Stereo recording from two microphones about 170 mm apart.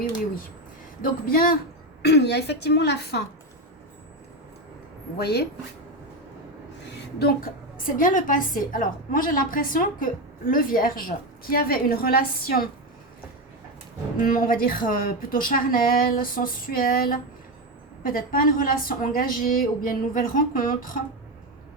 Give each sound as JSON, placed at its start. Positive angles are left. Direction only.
{"t": 1.0, "sound": "a woman's voice", "side_deg": 60}
{"t": 2.0, "sound": "a woman's voice", "side_deg": 75}
{"t": 5.1, "sound": "a woman's voice", "side_deg": 70}
{"t": 7.8, "sound": "a woman's voice", "side_deg": 55}
{"t": 14.2, "sound": "a woman's voice", "side_deg": 55}